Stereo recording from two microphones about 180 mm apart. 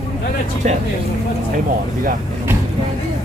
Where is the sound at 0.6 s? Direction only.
45° right (ahead or behind).